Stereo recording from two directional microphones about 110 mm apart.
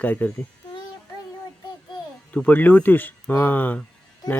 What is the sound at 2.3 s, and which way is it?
Speech, 15° left (ahead or behind).